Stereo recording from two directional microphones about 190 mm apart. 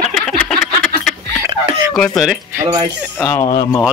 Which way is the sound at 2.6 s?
20° right (ahead or behind).